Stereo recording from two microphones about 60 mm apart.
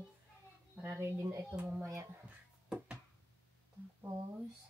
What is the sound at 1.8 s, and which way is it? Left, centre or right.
Speech, right.